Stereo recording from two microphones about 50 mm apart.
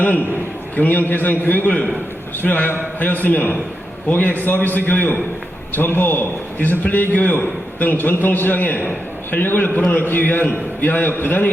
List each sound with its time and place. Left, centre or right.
0.8 s a man's voice: left